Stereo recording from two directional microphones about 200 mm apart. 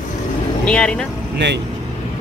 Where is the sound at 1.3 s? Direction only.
60° right (ahead or behind).